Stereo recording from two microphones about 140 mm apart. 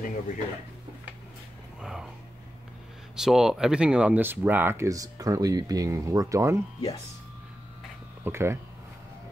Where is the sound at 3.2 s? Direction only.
5° right (ahead or behind); by 6.6 s 20° right (ahead or behind).